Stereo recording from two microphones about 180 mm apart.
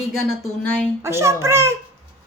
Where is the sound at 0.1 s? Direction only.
5° left (ahead or behind).